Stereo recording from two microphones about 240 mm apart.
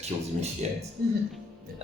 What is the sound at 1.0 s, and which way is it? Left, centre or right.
Speech, right.